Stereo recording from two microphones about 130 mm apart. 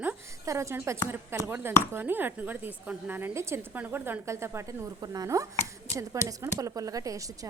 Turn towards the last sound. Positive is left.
turn(degrees=-25)  # may be behind; listen again after turning